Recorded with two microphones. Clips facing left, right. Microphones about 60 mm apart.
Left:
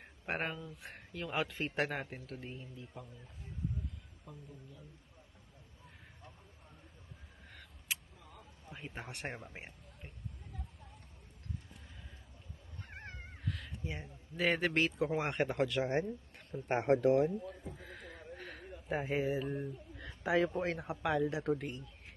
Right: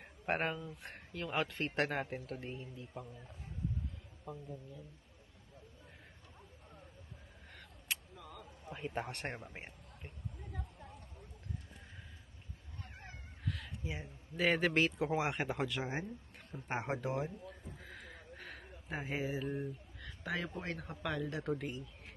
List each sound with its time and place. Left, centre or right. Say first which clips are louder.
0.0 s speech: right 2 dB; centre
4.3 s speech: right 6 dB; centre
7.9 s vehicle: even; centre
8.7 s a man's voice: right 5 dB; centre
13.4 s speech: even; centre
17.7 s a sound: left 2 dB; centre
18.9 s speech: left 5 dB; centre